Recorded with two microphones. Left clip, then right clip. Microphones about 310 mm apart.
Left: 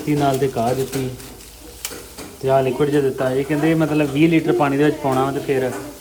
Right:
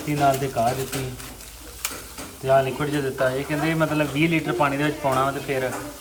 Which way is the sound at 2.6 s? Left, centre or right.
Centre.